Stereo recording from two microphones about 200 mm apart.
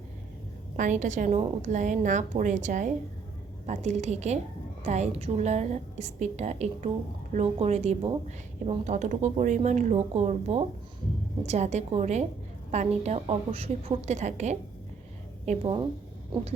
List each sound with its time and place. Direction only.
0.8 s a woman's voice: 40° right (ahead or behind)